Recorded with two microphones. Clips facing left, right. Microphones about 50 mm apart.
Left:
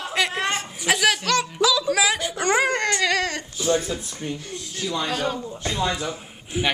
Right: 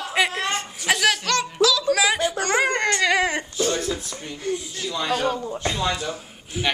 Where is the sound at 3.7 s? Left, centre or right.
Left.